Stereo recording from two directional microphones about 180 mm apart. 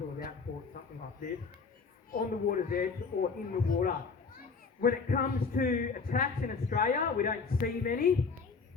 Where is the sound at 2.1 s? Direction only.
50° left (ahead or behind).